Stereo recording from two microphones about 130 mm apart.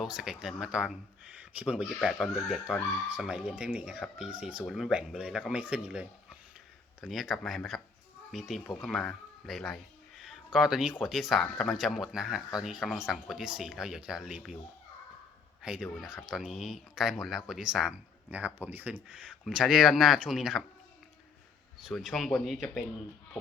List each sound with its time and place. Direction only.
0.0 s speech: 5° right (ahead or behind)
2.1 s speech: 10° left (ahead or behind)
2.7 s speech: 5° right (ahead or behind)
15.6 s speech: 5° right (ahead or behind)
21.8 s speech: centre (ahead or behind)